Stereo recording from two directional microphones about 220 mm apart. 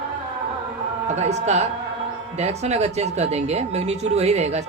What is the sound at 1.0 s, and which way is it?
A woman's voice, 30° right (ahead or behind).